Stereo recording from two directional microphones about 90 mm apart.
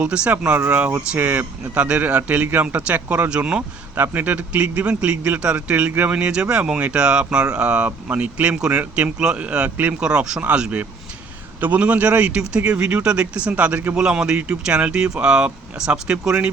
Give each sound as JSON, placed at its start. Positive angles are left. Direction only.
{"t": 0.0, "sound": "a man's voice", "side_deg": -15}
{"t": 3.9, "sound": "a man's voice", "side_deg": -20}